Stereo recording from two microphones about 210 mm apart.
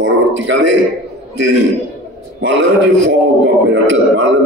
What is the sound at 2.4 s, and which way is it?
Speech, 60° right (ahead or behind).